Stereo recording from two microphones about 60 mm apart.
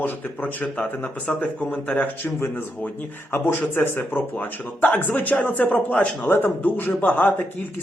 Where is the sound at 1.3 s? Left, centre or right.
Centre.